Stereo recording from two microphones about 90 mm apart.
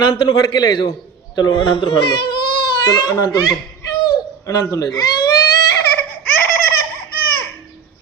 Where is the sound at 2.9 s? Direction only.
50° left (ahead or behind).